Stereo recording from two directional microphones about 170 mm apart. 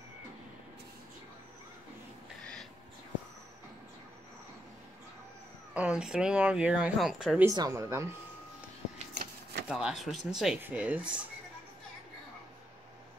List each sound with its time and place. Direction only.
5.8 s speech: 5° right (ahead or behind)
7.4 s speech: 20° right (ahead or behind)
9.2 s shuffling cards: 75° right (ahead or behind)
9.7 s speech: 5° right (ahead or behind)